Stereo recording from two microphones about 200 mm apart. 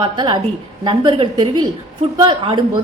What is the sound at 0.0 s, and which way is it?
A woman's voice, 25° right (ahead or behind).